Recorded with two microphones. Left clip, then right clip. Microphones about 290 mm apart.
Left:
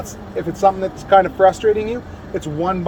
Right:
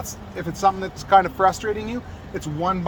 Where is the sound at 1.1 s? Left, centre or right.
Centre.